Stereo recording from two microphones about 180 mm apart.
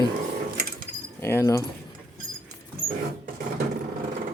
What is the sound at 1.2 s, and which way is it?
Speech, 15° left (ahead or behind).